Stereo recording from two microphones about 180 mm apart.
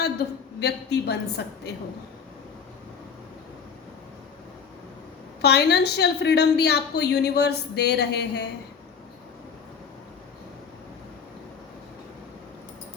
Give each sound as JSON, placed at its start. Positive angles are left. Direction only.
{"t": 0.6, "sound": "a woman's voice", "side_deg": 65}
{"t": 5.4, "sound": "a woman's voice", "side_deg": 65}